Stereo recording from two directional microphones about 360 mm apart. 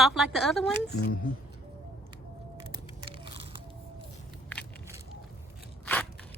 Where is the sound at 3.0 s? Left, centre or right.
Centre.